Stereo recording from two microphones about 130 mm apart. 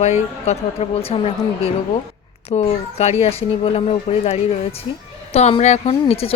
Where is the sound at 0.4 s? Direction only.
50° left (ahead or behind).